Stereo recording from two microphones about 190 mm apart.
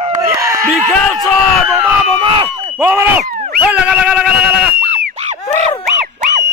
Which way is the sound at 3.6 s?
10° right (ahead or behind).